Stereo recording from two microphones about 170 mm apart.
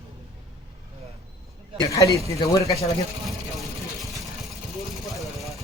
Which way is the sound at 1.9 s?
20° left (ahead or behind).